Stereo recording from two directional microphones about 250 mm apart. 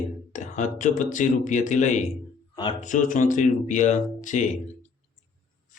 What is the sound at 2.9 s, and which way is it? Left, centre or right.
Speech, left.